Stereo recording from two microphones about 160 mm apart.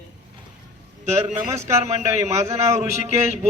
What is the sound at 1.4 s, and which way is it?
Speech, 45° right (ahead or behind).